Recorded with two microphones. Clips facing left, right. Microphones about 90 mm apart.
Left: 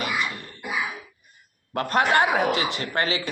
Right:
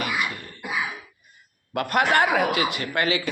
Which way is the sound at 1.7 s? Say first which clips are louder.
Even; 30° left (ahead or behind).